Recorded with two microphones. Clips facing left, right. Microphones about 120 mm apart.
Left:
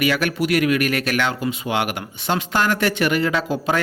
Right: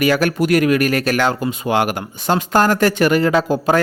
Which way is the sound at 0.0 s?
40° right (ahead or behind).